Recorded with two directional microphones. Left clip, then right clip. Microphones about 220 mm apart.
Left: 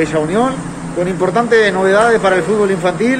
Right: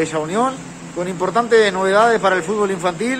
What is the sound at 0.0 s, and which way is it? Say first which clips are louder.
Speech: left 4 dB; 25° right (ahead or behind).